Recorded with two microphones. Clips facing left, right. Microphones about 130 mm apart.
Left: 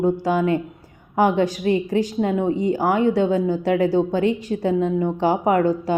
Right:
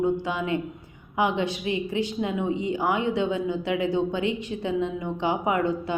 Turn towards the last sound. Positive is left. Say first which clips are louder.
# left 6 dB
turn(degrees=40)  # may be behind; listen again after turning